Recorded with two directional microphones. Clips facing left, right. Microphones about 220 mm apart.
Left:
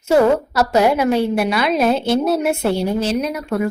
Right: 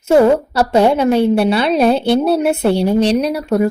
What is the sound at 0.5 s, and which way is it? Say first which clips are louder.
A woman's voice: right 3 dB; 30° right (ahead or behind).